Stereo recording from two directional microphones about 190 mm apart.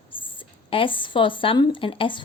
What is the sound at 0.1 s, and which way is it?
A woman's voice, 25° left (ahead or behind).